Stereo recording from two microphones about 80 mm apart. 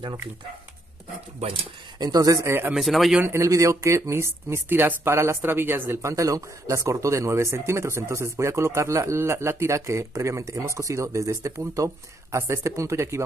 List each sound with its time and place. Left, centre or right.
2.0 s speech: right
2.4 s speech: right
2.7 s speech: centre
3.3 s speech: right